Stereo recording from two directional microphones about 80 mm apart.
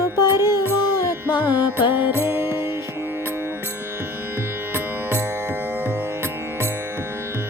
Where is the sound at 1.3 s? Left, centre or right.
Left.